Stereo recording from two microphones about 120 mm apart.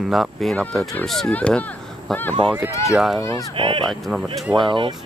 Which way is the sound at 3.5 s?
45° right (ahead or behind).